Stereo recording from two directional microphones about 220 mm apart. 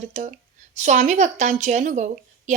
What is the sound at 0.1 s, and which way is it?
Speech, 30° right (ahead or behind).